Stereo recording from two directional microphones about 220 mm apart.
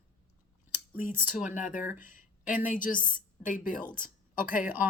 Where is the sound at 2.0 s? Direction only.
35° left (ahead or behind).